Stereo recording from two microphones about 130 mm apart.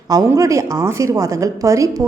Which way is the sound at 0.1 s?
30° right (ahead or behind).